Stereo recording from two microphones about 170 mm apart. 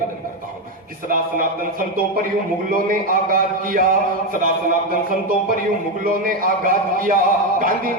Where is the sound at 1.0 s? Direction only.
55° right (ahead or behind).